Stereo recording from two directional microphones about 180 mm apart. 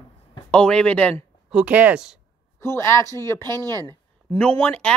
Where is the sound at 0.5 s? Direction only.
5° left (ahead or behind).